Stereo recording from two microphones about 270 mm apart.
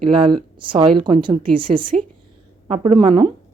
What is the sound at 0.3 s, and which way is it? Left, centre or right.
A woman's voice, centre.